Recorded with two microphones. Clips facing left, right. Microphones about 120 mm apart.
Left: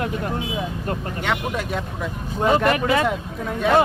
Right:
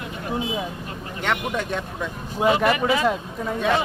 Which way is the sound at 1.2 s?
5° left (ahead or behind).